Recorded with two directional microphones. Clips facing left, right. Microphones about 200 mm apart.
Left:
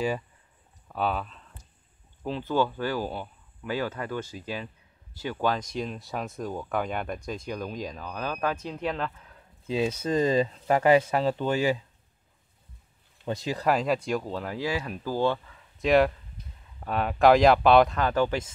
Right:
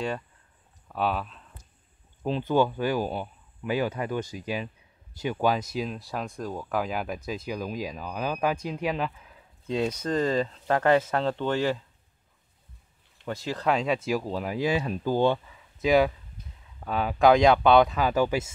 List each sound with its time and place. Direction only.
0.8 s speech: centre (ahead or behind)
2.2 s speech: 20° right (ahead or behind)
9.7 s speech: 5° left (ahead or behind)
13.2 s speech: 15° left (ahead or behind)
13.7 s speech: centre (ahead or behind); by 15.5 s 15° right (ahead or behind)
15.8 s speech: centre (ahead or behind)